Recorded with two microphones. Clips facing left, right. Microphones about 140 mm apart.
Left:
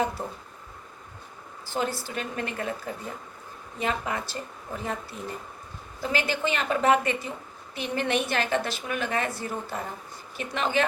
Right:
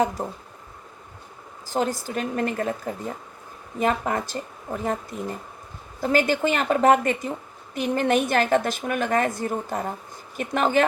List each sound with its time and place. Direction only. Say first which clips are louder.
0.0 s speech: right 4 dB; 40° right (ahead or behind)
1.6 s a woman's voice: right 4 dB; 40° right (ahead or behind)